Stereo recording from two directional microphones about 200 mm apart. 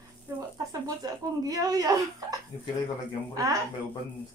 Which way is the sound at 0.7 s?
20° right (ahead or behind).